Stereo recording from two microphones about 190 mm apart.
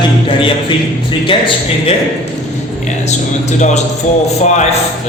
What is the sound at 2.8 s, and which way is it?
Speech, 40° left (ahead or behind).